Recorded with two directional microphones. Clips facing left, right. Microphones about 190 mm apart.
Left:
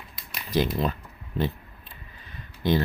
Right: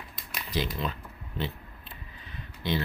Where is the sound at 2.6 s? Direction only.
45° left (ahead or behind).